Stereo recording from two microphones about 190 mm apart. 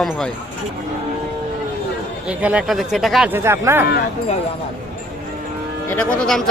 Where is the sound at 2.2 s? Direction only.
5° right (ahead or behind).